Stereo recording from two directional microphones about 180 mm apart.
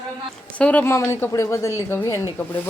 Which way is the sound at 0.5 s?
10° left (ahead or behind).